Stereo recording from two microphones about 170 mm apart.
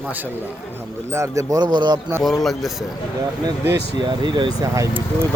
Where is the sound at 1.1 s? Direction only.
15° right (ahead or behind).